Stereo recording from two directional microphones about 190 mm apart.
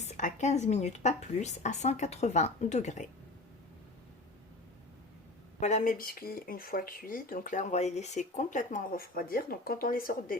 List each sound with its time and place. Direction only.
0.0 s a woman's voice: 40° left (ahead or behind)
5.5 s speech: 40° left (ahead or behind)